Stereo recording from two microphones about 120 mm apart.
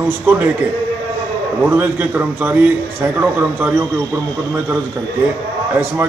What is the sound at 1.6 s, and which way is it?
A man's voice, 15° right (ahead or behind).